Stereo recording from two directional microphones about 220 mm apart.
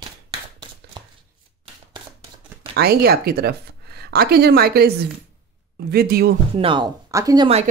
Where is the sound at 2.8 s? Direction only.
45° right (ahead or behind).